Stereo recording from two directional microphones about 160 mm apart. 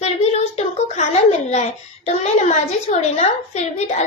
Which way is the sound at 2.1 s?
45° left (ahead or behind).